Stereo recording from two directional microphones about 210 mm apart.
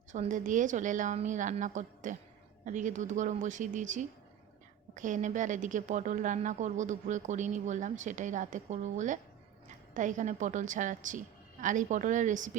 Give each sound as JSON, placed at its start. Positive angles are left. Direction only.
{"t": 0.1, "sound": "a woman's voice", "side_deg": -35}